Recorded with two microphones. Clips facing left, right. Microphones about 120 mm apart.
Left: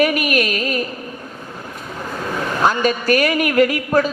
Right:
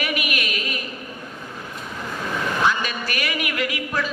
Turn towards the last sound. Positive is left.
turn(degrees=45)  # may be behind; listen again after turning